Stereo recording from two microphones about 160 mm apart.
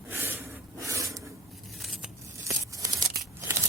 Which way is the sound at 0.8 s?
20° right (ahead or behind).